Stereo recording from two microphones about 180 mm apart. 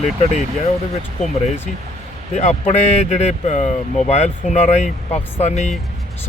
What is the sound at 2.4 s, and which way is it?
Speech, 40° left (ahead or behind).